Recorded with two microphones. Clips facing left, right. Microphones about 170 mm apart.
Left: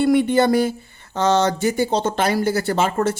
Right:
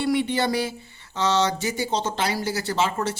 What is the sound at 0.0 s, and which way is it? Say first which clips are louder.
A woman's voice: left 7 dB; 50° left (ahead or behind).